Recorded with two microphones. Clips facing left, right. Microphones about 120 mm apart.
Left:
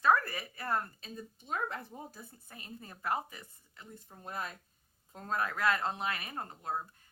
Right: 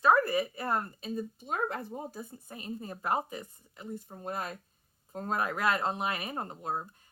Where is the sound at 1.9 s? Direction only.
35° right (ahead or behind).